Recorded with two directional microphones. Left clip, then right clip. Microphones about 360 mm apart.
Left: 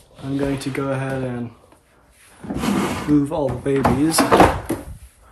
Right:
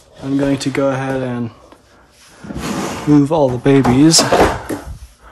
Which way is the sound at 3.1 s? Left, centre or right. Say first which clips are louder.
Right 9 dB; centre.